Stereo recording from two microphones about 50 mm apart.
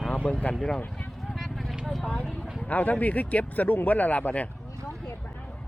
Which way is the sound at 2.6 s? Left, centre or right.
Left.